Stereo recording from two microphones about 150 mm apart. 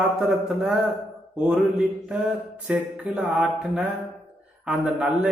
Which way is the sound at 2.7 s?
5° right (ahead or behind).